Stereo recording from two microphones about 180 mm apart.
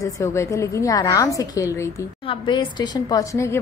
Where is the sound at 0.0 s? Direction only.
15° left (ahead or behind).